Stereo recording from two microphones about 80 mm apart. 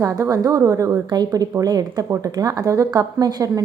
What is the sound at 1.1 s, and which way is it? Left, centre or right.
A woman's voice, right.